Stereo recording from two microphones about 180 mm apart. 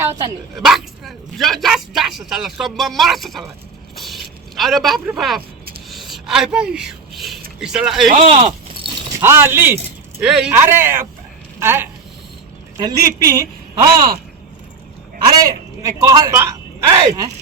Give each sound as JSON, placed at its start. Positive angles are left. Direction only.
{"t": 0.0, "sound": "a woman's voice", "side_deg": -15}
{"t": 0.5, "sound": "speech", "side_deg": 0}
{"t": 3.9, "sound": "a sound", "side_deg": 0}
{"t": 7.6, "sound": "speech", "side_deg": -5}
{"t": 8.1, "sound": "a sound", "side_deg": -35}
{"t": 9.2, "sound": "speech", "side_deg": -15}
{"t": 15.4, "sound": "speech", "side_deg": -20}